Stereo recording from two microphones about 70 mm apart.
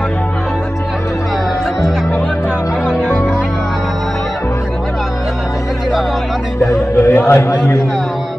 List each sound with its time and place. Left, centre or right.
2.9 s music: centre
7.0 s a man's voice: left